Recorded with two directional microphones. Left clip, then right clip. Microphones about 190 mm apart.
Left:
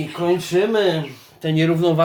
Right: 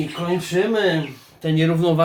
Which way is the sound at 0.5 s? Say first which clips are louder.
Right 1 dB; 35° left (ahead or behind).